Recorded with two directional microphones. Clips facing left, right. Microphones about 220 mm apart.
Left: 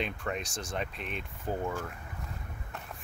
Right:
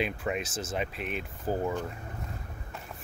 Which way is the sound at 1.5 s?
35° right (ahead or behind).